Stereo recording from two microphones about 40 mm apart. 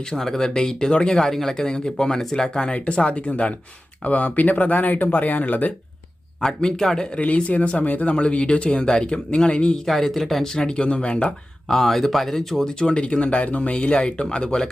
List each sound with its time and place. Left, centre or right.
0.1 s speech: centre
1.1 s speech: centre
1.6 s speech: centre
2.7 s speech: left
6.4 s speech: centre
7.2 s speech: left
8.1 s speech: left
9.7 s speech: centre; by 11.3 s left
11.7 s speech: centre
12.6 s speech: centre
13.0 s speech: left